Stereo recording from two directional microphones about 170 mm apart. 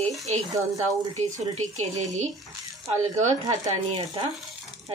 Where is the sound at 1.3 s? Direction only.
40° right (ahead or behind).